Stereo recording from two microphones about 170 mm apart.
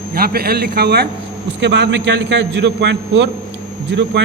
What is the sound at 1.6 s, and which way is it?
A man's voice, 90° right.